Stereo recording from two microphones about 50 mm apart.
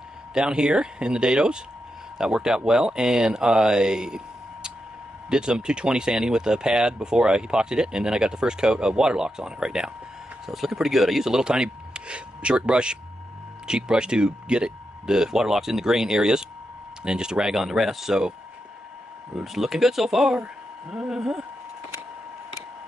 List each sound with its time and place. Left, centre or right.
0.3 s speech: centre
5.3 s speech: centre
19.3 s speech: centre